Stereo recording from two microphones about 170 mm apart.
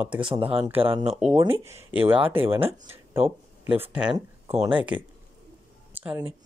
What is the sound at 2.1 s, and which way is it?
Speech, 30° right (ahead or behind).